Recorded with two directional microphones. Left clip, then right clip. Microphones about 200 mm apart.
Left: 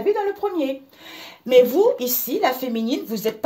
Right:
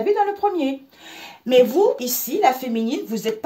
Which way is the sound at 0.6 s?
25° left (ahead or behind).